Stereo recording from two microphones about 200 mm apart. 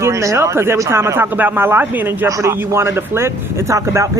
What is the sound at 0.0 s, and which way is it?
Speech, 15° right (ahead or behind).